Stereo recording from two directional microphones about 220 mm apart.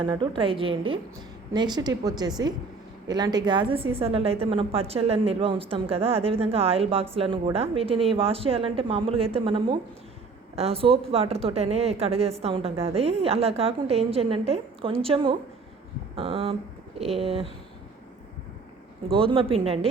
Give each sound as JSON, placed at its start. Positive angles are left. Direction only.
{"t": 0.0, "sound": "a woman's voice", "side_deg": -20}
{"t": 19.0, "sound": "a woman's voice", "side_deg": -25}